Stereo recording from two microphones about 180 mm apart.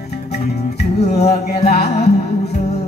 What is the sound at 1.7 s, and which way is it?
Music, 60° left (ahead or behind).